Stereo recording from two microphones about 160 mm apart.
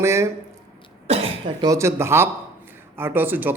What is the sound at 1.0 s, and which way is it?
Cough, 40° right (ahead or behind).